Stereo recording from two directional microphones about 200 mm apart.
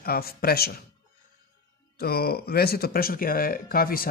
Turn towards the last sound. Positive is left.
turn(degrees=45)  # may be behind; listen again after turning